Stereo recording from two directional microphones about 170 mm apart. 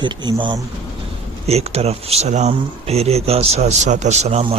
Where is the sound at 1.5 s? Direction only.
40° right (ahead or behind).